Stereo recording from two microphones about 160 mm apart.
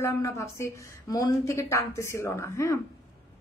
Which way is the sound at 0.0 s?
20° left (ahead or behind).